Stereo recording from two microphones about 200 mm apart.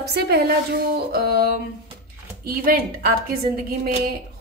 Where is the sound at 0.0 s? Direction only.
55° right (ahead or behind).